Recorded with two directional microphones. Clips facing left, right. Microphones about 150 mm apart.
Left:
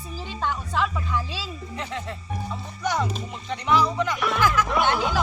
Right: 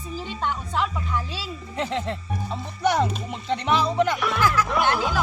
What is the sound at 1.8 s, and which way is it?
Speech, 25° right (ahead or behind).